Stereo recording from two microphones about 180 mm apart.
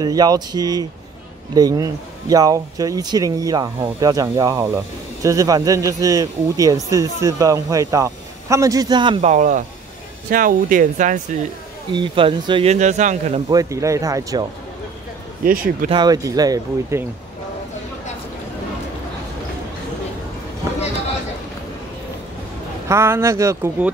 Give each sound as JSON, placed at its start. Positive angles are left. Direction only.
{"t": 0.0, "sound": "speech", "side_deg": -20}
{"t": 9.3, "sound": "speech", "side_deg": -45}
{"t": 11.9, "sound": "speech", "side_deg": -25}
{"t": 12.7, "sound": "speech", "side_deg": -40}
{"t": 13.5, "sound": "speech", "side_deg": -20}
{"t": 15.4, "sound": "speech", "side_deg": -50}
{"t": 15.9, "sound": "speech", "side_deg": -20}
{"t": 22.8, "sound": "speech", "side_deg": -15}